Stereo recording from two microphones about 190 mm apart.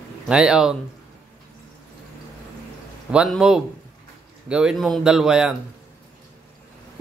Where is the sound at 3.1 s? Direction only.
Centre (ahead or behind).